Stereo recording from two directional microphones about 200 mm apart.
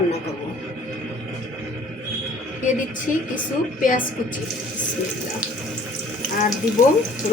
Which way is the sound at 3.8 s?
40° left (ahead or behind).